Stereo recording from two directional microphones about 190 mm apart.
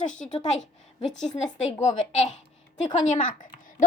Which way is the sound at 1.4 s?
35° left (ahead or behind).